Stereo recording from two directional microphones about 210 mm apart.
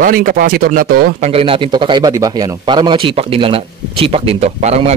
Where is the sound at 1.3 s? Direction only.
25° right (ahead or behind).